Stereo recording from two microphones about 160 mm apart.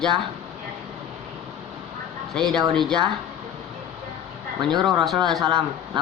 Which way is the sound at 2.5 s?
5° left (ahead or behind).